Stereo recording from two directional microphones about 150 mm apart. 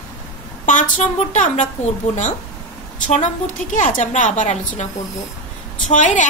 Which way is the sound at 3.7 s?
60° left (ahead or behind).